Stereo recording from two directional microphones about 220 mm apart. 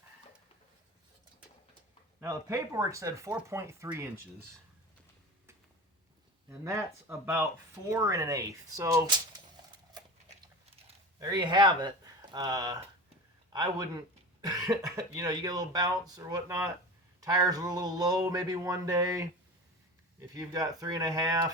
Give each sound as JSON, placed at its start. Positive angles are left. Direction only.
{"t": 2.2, "sound": "speech", "side_deg": -15}
{"t": 6.5, "sound": "speech", "side_deg": -10}
{"t": 11.2, "sound": "speech", "side_deg": -20}
{"t": 20.3, "sound": "speech", "side_deg": -15}